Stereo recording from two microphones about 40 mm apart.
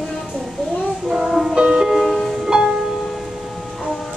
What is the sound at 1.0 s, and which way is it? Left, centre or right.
Music, centre.